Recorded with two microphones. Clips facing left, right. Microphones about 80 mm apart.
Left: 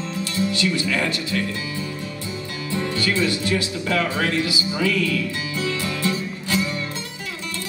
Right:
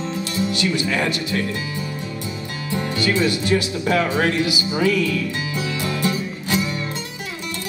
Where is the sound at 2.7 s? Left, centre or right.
Centre.